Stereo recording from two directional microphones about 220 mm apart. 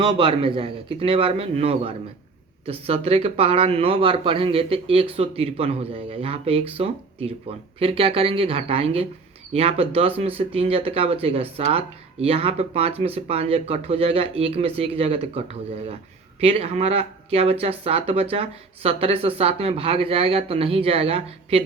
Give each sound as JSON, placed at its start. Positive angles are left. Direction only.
{"t": 0.0, "sound": "speech", "side_deg": -25}
{"t": 16.4, "sound": "speech", "side_deg": -25}